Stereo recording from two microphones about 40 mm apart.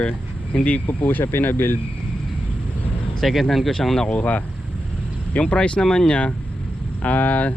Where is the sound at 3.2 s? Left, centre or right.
Centre.